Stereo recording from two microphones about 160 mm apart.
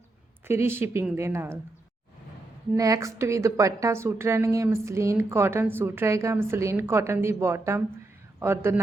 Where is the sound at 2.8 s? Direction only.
20° right (ahead or behind).